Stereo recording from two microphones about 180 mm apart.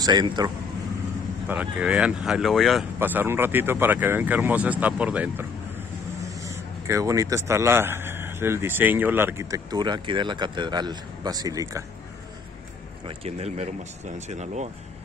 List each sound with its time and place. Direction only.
0.0 s a man's voice: 20° right (ahead or behind)
1.5 s speech: 5° right (ahead or behind)
3.0 s speech: 10° right (ahead or behind)
13.0 s speech: 30° right (ahead or behind)